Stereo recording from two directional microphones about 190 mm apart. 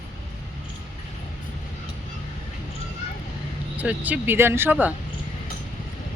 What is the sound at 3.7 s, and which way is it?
Speech, 10° right (ahead or behind).